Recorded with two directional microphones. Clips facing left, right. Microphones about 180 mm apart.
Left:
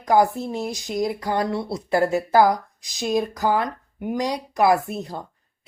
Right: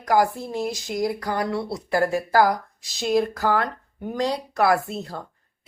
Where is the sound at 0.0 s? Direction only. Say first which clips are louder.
Left 2 dB; 20° left (ahead or behind).